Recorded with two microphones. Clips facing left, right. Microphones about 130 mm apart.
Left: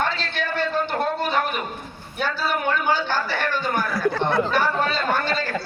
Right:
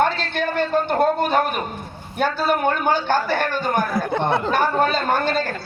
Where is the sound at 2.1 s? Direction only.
50° right (ahead or behind).